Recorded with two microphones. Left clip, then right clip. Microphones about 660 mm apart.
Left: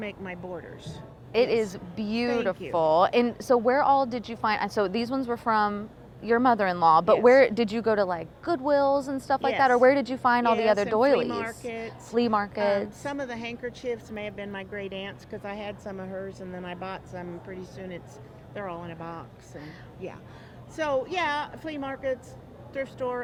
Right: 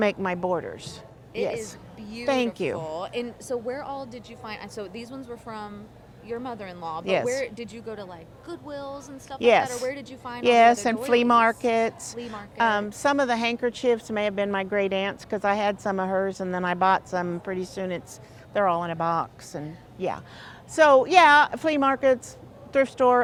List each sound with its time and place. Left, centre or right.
0.0 s a woman's voice: right
1.3 s a woman's voice: left
10.4 s a woman's voice: right
12.2 s speech: left
12.5 s a woman's voice: right
20.7 s a woman's voice: right